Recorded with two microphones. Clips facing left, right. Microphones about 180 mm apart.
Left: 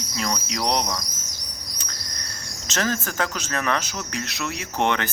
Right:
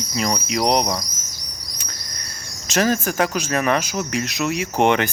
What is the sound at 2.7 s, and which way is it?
Speech, 15° right (ahead or behind).